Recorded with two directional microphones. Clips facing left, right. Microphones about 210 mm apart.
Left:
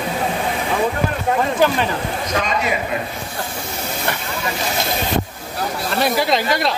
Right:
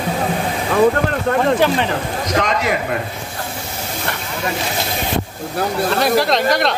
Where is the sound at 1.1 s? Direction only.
70° right (ahead or behind).